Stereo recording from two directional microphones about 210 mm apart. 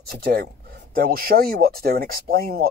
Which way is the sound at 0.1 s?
50° right (ahead or behind).